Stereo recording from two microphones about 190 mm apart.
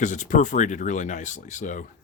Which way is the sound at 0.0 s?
40° left (ahead or behind).